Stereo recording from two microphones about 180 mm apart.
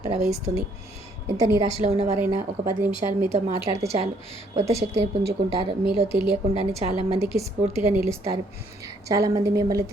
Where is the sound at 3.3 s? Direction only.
40° right (ahead or behind).